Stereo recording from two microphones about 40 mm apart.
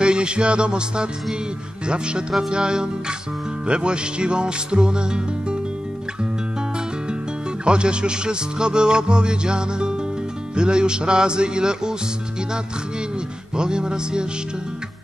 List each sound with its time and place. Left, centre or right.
0.0 s music: right
2.5 s music: right
7.6 s music: right
13.6 s music: right